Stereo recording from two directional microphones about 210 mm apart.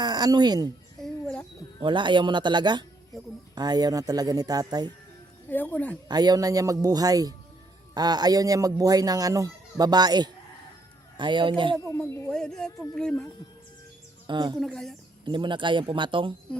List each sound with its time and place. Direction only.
0.0 s speech: 20° right (ahead or behind)
1.0 s a sound: 5° left (ahead or behind)
1.8 s speech: 20° right (ahead or behind)
5.5 s speech: 10° left (ahead or behind)
6.1 s speech: 20° right (ahead or behind)
11.9 s speech: 10° left (ahead or behind)
14.3 s speech: 20° right (ahead or behind)
14.6 s speech: centre (ahead or behind)
15.2 s speech: 20° right (ahead or behind)